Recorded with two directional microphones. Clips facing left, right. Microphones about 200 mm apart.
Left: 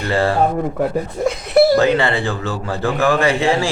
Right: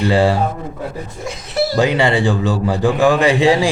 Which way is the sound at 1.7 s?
15° right (ahead or behind).